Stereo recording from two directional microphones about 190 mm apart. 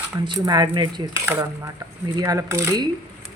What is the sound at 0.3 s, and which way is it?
Speech, 20° right (ahead or behind).